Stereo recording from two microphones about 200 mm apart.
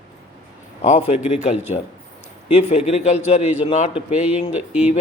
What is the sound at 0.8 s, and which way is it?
Speech, 30° left (ahead or behind).